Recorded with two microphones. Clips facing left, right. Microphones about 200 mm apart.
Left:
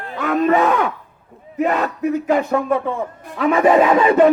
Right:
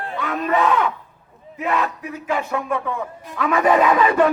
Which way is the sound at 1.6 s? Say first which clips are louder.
Left 4 dB; 40° left (ahead or behind).